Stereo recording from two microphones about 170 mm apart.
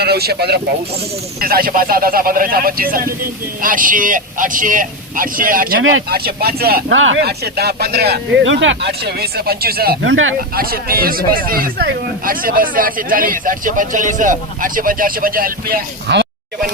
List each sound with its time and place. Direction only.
0.0 s speech: 70° right (ahead or behind)